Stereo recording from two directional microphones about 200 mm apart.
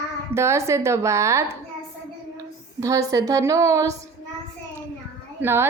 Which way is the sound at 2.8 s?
15° right (ahead or behind).